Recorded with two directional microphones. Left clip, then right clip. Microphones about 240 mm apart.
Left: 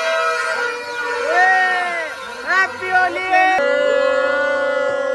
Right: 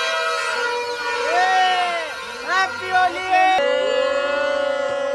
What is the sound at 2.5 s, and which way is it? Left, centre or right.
Music, centre.